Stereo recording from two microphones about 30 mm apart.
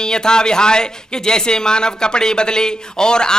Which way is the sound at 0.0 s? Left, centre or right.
Left.